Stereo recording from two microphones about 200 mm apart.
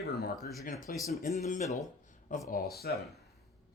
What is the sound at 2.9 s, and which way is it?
Speech, 50° left (ahead or behind).